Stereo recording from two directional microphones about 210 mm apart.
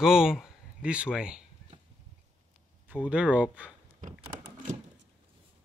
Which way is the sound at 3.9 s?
35° right (ahead or behind).